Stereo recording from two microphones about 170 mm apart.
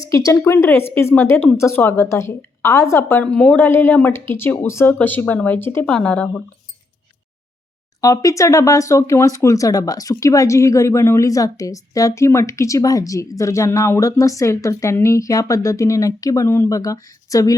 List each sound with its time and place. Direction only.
0.0 s a woman's voice: 20° left (ahead or behind)
8.0 s speech: 20° left (ahead or behind)